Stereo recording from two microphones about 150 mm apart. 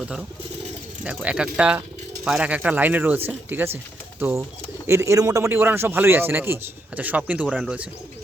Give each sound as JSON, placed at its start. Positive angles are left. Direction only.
{"t": 1.0, "sound": "a man's voice", "side_deg": -10}